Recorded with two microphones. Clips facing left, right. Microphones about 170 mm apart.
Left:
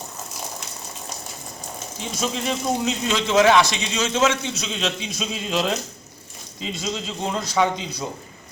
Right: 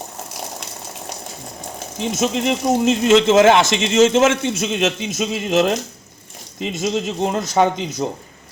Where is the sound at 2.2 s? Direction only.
65° right (ahead or behind); by 3.3 s 80° right.